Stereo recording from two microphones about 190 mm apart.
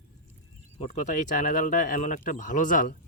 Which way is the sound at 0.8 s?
35° left (ahead or behind).